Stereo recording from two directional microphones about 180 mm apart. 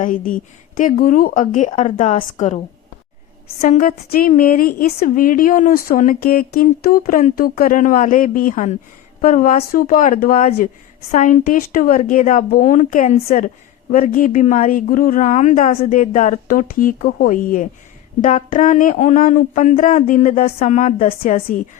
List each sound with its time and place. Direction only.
0.0 s a woman's voice: 50° left (ahead or behind)
3.6 s a woman's voice: 50° left (ahead or behind)